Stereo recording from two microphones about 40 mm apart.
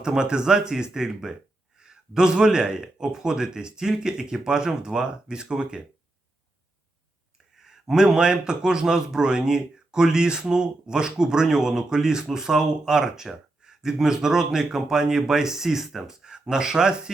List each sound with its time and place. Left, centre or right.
0.0 s speech: centre
7.5 s speech: centre